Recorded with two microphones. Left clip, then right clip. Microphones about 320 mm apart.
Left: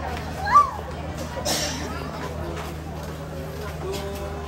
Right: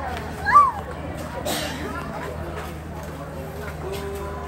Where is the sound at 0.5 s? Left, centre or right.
Centre.